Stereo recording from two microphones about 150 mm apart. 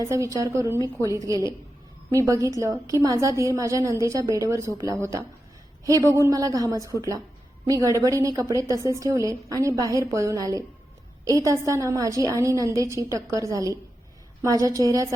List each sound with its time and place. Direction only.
0.1 s a woman's voice: 20° right (ahead or behind)